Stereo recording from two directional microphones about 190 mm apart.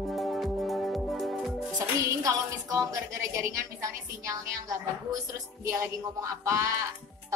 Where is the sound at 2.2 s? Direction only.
15° right (ahead or behind).